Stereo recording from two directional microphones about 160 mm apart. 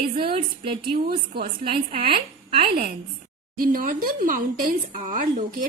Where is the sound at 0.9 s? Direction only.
70° right (ahead or behind).